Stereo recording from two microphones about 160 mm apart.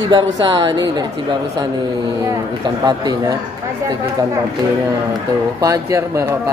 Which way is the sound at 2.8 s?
25° right (ahead or behind).